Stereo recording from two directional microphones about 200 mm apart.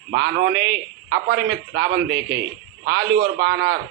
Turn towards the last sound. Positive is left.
turn(degrees=-50)  # may be behind; listen again after turning